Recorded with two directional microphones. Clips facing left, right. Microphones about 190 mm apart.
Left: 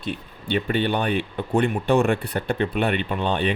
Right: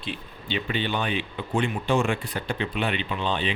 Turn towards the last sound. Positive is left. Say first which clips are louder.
# left 4 dB
turn(degrees=55)  # may be behind; listen again after turning